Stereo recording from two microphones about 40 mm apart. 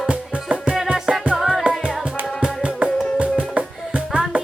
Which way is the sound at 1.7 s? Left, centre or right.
Right.